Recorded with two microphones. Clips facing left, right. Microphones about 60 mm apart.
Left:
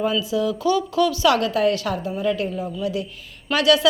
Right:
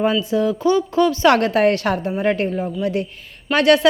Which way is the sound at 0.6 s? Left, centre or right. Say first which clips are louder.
Right 3 dB; right.